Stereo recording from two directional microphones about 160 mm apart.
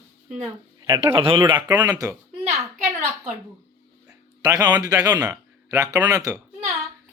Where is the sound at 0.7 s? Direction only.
25° right (ahead or behind).